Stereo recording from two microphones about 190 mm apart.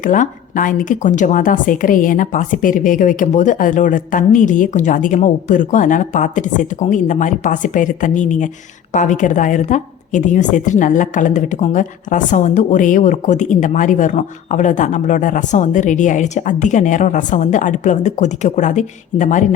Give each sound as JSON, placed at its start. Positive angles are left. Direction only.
{"t": 0.0, "sound": "a woman's voice", "side_deg": 45}